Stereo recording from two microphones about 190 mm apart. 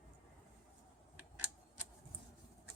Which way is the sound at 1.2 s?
10° right (ahead or behind).